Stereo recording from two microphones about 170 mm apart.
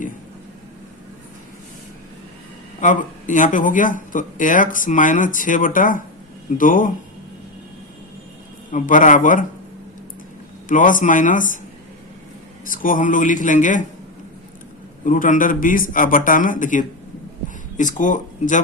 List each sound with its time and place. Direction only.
2.8 s speech: 50° left (ahead or behind)
8.7 s speech: 50° left (ahead or behind)
10.7 s speech: 50° left (ahead or behind)
12.6 s speech: 55° left (ahead or behind)
15.0 s speech: 50° left (ahead or behind)